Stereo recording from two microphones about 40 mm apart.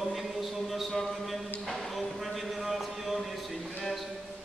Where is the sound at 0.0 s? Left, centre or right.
Centre.